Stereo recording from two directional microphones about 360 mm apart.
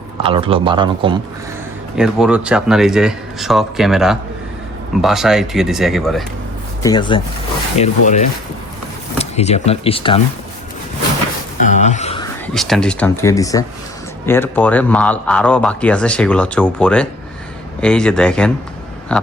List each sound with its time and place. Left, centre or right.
0.2 s speech: centre
2.0 s speech: centre
6.8 s speech: centre
11.6 s speech: centre
12.5 s a man's voice: centre